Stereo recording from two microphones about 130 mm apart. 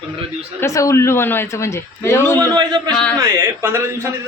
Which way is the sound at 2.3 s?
35° right (ahead or behind).